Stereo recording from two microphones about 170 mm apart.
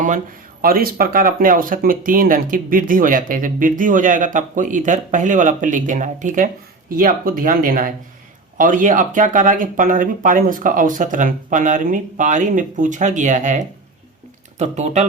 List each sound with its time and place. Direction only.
0.6 s speech: 60° right (ahead or behind); by 15.0 s 40° right (ahead or behind)